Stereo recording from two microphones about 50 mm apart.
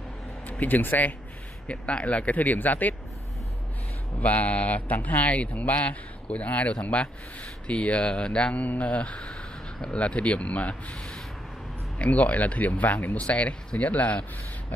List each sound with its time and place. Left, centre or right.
0.5 s speech: left
1.7 s speech: left
4.2 s speech: left
8.5 s speech: left
12.0 s speech: left